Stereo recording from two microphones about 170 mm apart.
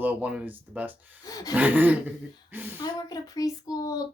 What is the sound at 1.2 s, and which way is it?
Speech, 20° left (ahead or behind).